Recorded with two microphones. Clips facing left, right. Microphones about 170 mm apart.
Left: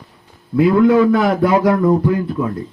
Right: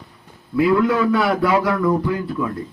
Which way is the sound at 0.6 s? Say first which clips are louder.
Left 5 dB; 50° left (ahead or behind).